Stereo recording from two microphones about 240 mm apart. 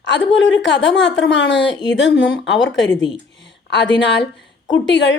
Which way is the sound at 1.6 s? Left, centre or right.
Centre.